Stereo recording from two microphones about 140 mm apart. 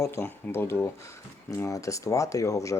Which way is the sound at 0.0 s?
20° left (ahead or behind).